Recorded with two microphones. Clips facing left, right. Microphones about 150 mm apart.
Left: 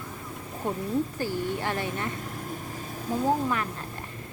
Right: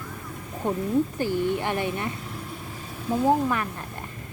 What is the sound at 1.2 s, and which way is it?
Speech, 20° right (ahead or behind).